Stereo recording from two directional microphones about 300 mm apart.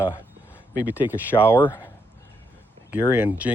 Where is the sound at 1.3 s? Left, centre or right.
Centre.